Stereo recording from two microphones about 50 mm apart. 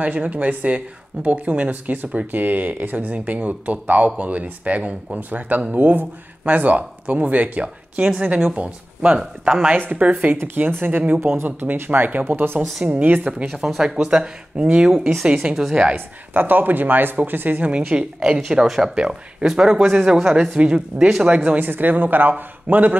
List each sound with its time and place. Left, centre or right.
0.0 s a woman's voice: right; by 9.7 s centre
9.7 s speech: right
10.3 s speech: right
13.8 s speech: centre
14.9 s speech: centre
15.2 s speech: centre
15.7 s a woman's voice: right
16.3 s speech: right
17.8 s speech: centre
20.3 s a woman's voice: centre
21.5 s speech: right